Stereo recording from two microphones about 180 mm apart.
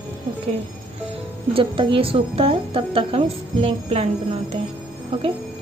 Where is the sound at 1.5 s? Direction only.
30° right (ahead or behind).